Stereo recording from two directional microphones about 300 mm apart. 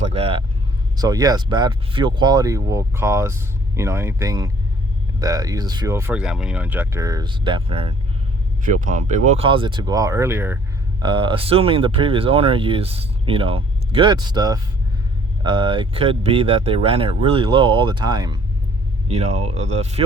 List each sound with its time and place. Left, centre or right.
0.1 s speech: centre